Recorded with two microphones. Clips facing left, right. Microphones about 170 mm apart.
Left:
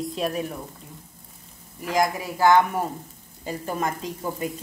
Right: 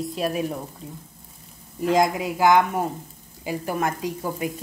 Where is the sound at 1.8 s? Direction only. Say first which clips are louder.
Right 4 dB; 25° right (ahead or behind).